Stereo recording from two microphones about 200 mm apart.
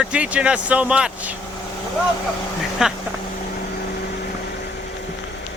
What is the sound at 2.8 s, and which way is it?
Speech, 5° right (ahead or behind).